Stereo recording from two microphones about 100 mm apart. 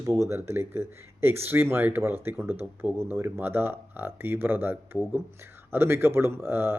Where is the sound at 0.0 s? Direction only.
30° right (ahead or behind).